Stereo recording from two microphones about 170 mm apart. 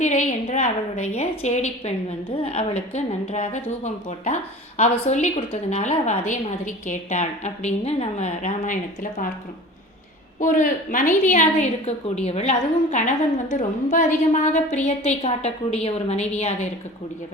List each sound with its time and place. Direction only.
0.0 s a woman's voice: 45° left (ahead or behind)
10.4 s a woman's voice: 50° left (ahead or behind)